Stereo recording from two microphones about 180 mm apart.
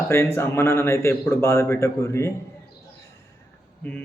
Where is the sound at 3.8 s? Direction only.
10° left (ahead or behind).